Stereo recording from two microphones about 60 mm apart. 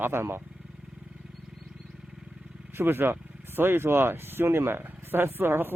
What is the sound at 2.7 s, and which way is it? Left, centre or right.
Speech, right.